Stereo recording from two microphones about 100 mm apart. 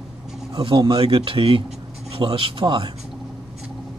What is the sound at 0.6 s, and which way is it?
Speech, 55° right (ahead or behind).